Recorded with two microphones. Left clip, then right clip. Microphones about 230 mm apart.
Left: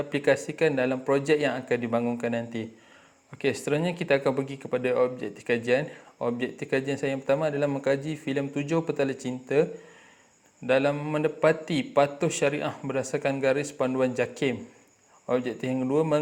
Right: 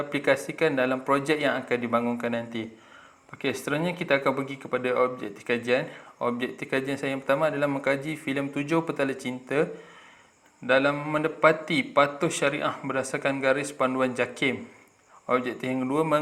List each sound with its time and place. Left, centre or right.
0.1 s speech: left
10.7 s speech: left